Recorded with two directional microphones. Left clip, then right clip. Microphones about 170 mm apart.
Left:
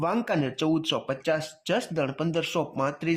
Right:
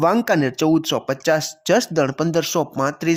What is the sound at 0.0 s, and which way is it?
Speech, 35° right (ahead or behind).